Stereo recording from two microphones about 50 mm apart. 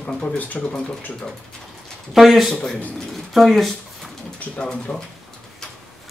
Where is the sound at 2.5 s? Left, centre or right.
Centre.